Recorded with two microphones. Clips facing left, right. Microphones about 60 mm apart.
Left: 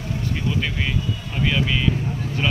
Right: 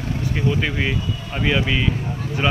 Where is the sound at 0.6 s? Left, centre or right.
Right.